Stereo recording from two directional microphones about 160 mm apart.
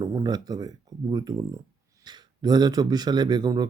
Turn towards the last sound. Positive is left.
turn(degrees=-25)  # may be behind; listen again after turning